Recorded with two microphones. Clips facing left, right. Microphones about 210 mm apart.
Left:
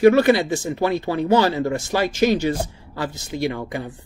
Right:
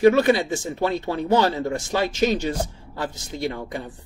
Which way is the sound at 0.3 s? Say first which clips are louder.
Left 3 dB; 65° left (ahead or behind).